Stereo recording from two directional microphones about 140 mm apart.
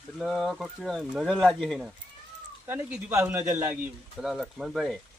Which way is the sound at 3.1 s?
15° right (ahead or behind).